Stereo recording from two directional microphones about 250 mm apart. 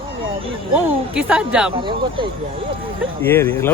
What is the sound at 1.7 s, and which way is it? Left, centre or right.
Speech, centre.